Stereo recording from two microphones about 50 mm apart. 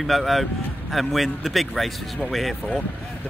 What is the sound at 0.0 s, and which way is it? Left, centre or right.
Speech, centre.